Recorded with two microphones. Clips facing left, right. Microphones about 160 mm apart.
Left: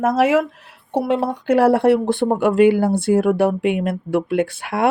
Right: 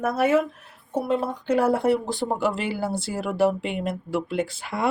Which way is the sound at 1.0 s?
70° left (ahead or behind).